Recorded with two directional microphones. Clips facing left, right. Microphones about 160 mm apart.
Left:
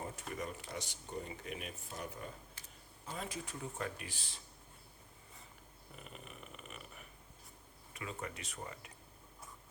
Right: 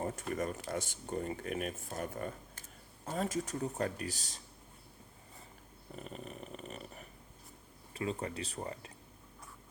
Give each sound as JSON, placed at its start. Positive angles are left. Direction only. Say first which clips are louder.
{"t": 0.0, "sound": "speech", "louder": "right 7 dB", "side_deg": -45}
{"t": 6.0, "sound": "dog", "louder": "right 7 dB", "side_deg": -40}
{"t": 7.9, "sound": "speech", "louder": "right 8 dB", "side_deg": -30}